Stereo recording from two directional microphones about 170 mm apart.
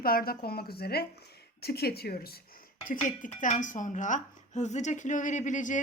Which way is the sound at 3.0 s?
50° left (ahead or behind).